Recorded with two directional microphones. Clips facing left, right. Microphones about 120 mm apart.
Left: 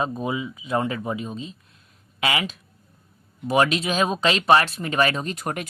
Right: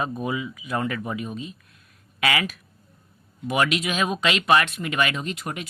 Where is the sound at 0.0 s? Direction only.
25° left (ahead or behind).